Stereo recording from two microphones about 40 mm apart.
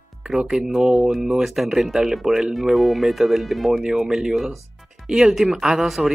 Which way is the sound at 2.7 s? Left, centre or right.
Centre.